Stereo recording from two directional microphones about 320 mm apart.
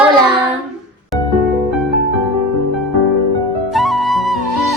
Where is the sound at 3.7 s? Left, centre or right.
Centre.